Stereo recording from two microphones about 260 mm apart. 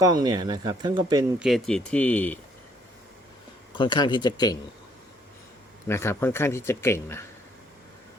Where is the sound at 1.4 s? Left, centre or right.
Centre.